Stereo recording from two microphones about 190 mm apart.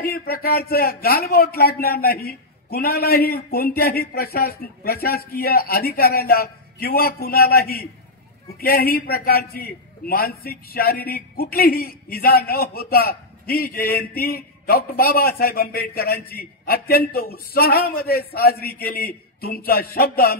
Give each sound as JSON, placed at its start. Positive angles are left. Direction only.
{"t": 0.0, "sound": "a man's voice", "side_deg": 55}